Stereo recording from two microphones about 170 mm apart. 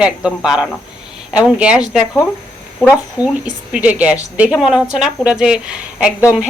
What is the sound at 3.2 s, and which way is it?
A woman's voice, 10° right (ahead or behind).